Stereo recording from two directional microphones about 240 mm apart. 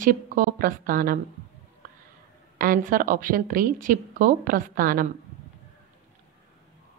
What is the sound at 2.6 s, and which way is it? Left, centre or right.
A woman's voice, right.